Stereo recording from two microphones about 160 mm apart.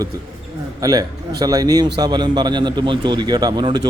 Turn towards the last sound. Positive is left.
turn(degrees=-25)  # may be behind; listen again after turning